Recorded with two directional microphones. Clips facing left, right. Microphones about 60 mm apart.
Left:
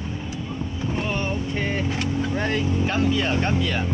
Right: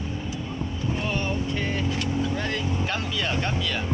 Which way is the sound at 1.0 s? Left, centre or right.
Left.